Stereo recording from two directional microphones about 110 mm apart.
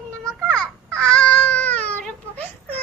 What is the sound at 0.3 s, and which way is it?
Babbling, 5° left (ahead or behind).